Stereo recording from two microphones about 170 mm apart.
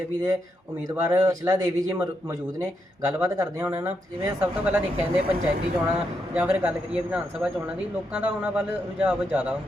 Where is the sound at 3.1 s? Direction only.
20° right (ahead or behind).